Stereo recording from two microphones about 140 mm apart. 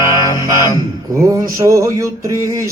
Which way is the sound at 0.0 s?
20° right (ahead or behind).